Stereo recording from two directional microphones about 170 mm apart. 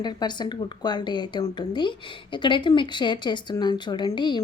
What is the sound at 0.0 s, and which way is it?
Speech, 25° left (ahead or behind).